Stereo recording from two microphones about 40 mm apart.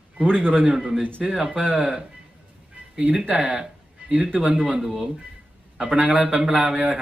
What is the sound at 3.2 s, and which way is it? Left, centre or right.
A man's voice, right.